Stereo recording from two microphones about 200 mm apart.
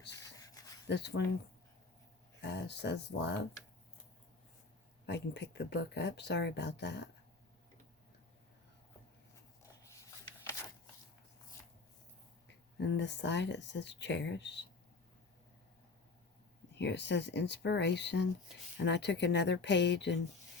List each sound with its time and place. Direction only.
0.3 s a sound: 15° left (ahead or behind)
0.9 s speech: 60° left (ahead or behind)
2.4 s speech: 60° left (ahead or behind)
5.0 s speech: 60° left (ahead or behind)
12.8 s speech: 60° left (ahead or behind)
16.7 s speech: 60° left (ahead or behind)